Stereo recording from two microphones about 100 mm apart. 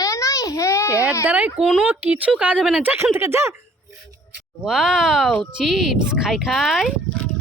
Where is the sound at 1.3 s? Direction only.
15° right (ahead or behind).